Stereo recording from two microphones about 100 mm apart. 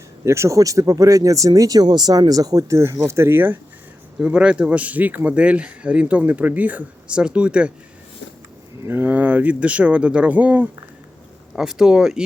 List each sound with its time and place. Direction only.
0.3 s speech: 30° right (ahead or behind)
4.2 s speech: 10° right (ahead or behind)
8.9 s speech: 20° right (ahead or behind)
11.5 s speech: 5° right (ahead or behind)